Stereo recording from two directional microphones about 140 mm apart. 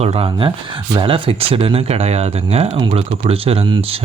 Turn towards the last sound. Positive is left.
turn(degrees=-45)  # may be behind; listen again after turning